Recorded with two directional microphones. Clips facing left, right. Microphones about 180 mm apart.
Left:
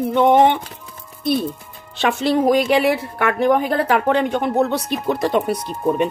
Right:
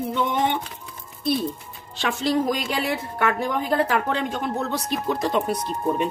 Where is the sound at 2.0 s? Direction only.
65° left (ahead or behind).